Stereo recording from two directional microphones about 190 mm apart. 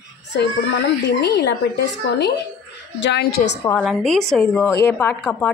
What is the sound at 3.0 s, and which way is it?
Speech, 60° left (ahead or behind).